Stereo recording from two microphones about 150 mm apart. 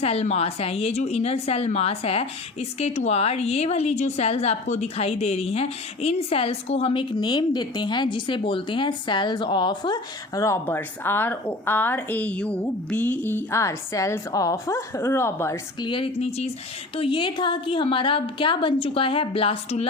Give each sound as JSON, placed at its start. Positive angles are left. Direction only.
{"t": 0.0, "sound": "a woman's voice", "side_deg": 45}
{"t": 15.8, "sound": "a woman's voice", "side_deg": 35}